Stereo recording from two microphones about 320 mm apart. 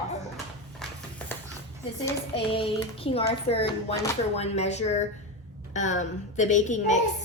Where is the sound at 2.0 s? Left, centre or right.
Centre.